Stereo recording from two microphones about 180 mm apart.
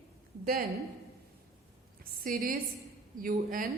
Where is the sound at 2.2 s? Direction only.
50° right (ahead or behind).